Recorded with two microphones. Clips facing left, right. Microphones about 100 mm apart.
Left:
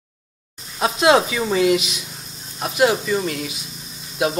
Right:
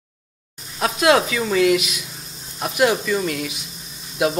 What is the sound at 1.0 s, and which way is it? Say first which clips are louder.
Speech: left 1 dB; 15° left (ahead or behind).